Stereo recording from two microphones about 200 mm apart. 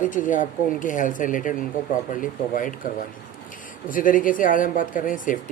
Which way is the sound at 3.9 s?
45° left (ahead or behind).